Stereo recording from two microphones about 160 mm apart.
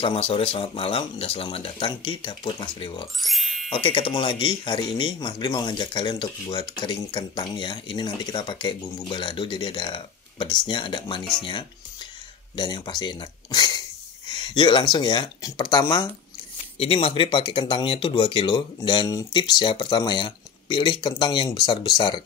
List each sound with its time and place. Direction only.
0.0 s speech: 35° left (ahead or behind)
3.2 s speech: centre (ahead or behind)
3.7 s speech: 30° left (ahead or behind)
11.4 s music: 30° left (ahead or behind)
12.5 s speech: 25° left (ahead or behind)
16.7 s speech: 35° left (ahead or behind)